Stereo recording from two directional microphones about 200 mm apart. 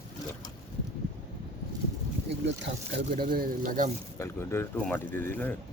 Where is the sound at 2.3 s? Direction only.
60° right (ahead or behind).